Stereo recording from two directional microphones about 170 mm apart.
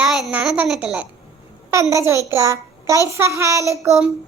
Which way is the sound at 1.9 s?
15° right (ahead or behind).